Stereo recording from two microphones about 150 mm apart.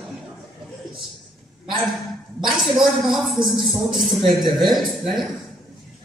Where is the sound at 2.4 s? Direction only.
Centre (ahead or behind).